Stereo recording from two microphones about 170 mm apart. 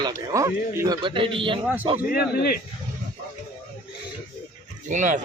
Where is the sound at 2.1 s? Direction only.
65° left (ahead or behind).